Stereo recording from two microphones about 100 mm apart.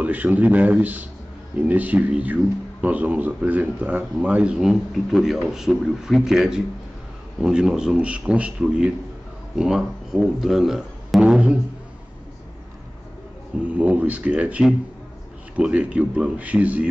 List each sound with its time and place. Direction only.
0.0 s speech: 15° right (ahead or behind)
13.7 s speech: 15° right (ahead or behind)